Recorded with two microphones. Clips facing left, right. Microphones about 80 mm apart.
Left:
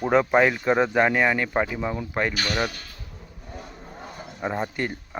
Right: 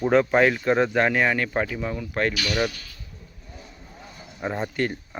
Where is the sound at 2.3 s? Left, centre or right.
Left.